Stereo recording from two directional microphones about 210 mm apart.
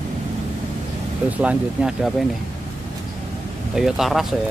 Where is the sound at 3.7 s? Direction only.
Centre (ahead or behind).